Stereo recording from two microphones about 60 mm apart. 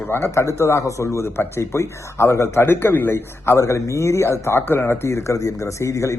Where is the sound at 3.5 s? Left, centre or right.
Left.